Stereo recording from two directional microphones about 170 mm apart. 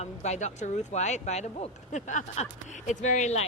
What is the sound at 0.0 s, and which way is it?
Speech, 40° left (ahead or behind).